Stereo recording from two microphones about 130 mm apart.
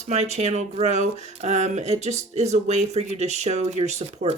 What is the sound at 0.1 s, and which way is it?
Speech, 55° right (ahead or behind).